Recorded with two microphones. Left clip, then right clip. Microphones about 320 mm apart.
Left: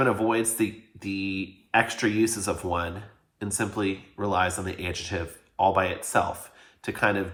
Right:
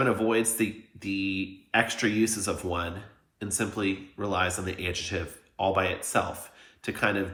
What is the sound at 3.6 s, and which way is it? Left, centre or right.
Speech, centre.